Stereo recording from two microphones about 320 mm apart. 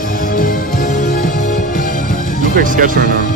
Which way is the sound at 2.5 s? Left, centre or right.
Right.